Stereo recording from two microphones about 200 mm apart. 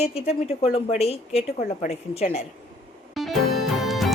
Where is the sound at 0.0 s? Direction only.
30° left (ahead or behind).